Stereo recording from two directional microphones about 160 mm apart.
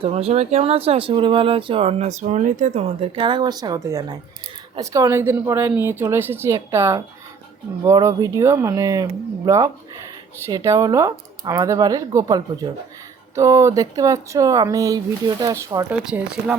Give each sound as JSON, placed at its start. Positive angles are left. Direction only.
{"t": 0.0, "sound": "a woman's voice", "side_deg": -40}
{"t": 15.9, "sound": "a woman's voice", "side_deg": -5}